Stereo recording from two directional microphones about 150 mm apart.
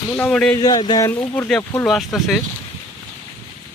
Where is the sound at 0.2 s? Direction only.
5° left (ahead or behind).